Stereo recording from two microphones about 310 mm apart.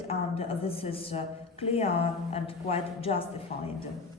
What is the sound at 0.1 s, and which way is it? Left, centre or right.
A woman's voice, centre.